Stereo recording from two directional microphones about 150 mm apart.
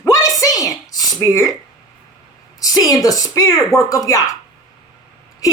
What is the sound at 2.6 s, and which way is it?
A woman's voice, 25° left (ahead or behind).